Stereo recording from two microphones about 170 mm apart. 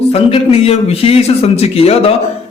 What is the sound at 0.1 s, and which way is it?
A man's voice, 35° left (ahead or behind).